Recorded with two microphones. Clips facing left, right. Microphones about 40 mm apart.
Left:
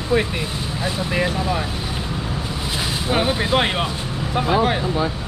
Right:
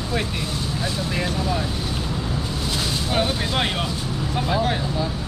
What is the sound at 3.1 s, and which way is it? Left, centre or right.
Speech, centre.